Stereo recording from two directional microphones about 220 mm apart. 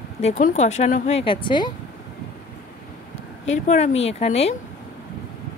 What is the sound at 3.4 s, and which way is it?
Speech, 30° left (ahead or behind).